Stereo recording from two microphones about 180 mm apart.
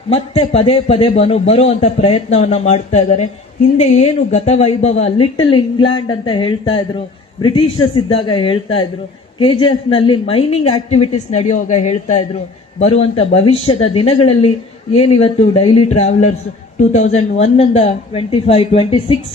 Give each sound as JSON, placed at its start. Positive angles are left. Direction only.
{"t": 0.1, "sound": "a woman's voice", "side_deg": 30}